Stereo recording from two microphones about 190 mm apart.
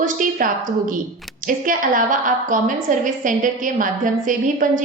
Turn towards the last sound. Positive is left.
turn(degrees=-45)  # may be behind; listen again after turning